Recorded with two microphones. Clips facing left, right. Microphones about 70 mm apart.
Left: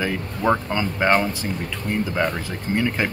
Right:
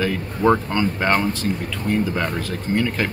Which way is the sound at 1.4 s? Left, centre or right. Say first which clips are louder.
Right 3 dB; centre.